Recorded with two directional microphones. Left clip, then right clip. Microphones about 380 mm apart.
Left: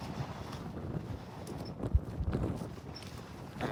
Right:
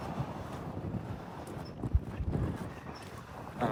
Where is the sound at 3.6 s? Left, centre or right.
Centre.